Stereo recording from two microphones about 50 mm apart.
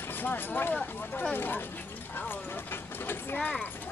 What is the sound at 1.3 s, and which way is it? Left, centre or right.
Speech, left.